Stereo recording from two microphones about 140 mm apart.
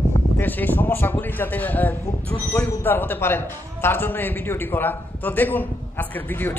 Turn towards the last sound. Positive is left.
turn(degrees=15)  # may be behind; listen again after turning